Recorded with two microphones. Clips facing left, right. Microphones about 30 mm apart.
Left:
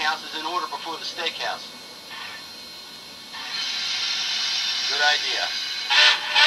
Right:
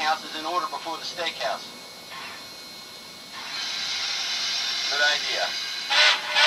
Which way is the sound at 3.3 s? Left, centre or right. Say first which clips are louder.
Left 3 dB; left.